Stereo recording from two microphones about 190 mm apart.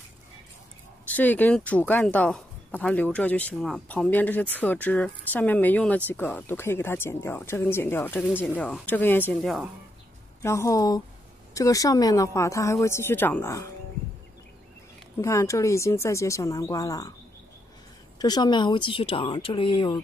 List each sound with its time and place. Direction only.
1.0 s speech: 10° left (ahead or behind)
10.4 s speech: 15° left (ahead or behind)
15.1 s speech: 15° left (ahead or behind)
18.2 s speech: 20° left (ahead or behind)